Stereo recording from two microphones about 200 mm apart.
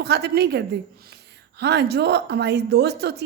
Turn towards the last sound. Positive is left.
turn(degrees=-55)  # may be behind; listen again after turning